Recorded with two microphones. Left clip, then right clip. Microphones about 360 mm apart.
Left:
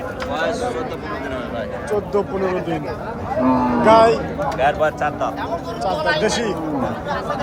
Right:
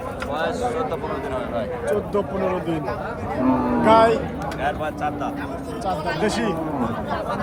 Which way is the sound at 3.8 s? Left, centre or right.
Centre.